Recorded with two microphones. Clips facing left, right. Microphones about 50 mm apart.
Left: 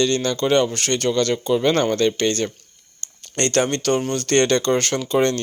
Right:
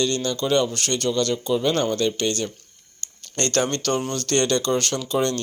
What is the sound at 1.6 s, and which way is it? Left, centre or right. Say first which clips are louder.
Speech: left 4 dB; left.